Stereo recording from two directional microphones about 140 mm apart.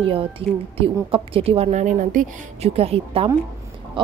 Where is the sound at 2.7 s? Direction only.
45° right (ahead or behind).